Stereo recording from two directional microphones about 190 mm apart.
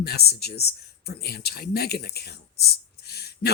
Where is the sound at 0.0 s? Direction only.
55° left (ahead or behind).